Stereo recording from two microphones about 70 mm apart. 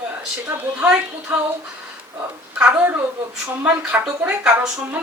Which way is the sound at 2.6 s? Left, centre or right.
Right.